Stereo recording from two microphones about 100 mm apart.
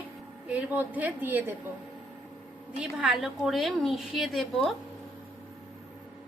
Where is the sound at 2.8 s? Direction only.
10° right (ahead or behind).